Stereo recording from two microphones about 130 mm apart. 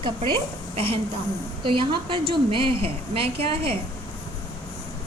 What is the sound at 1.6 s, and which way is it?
A woman's voice, 40° right (ahead or behind).